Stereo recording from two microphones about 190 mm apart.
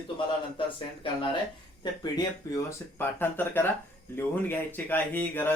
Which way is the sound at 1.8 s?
20° left (ahead or behind).